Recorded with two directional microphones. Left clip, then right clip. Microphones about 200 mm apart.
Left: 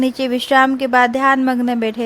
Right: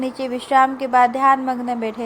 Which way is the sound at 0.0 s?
40° left (ahead or behind).